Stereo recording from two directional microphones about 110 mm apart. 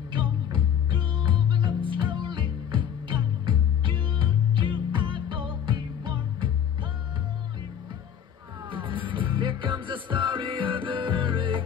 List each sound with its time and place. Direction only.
0.1 s music: 45° right (ahead or behind)
8.6 s music: 50° right (ahead or behind)